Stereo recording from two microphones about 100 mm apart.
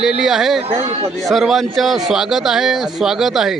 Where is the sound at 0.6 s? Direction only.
80° right.